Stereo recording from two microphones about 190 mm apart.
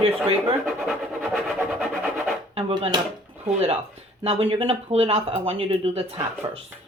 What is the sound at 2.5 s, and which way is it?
Speech, 30° right (ahead or behind).